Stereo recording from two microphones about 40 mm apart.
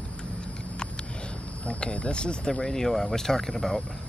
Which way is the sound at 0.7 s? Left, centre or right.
Left.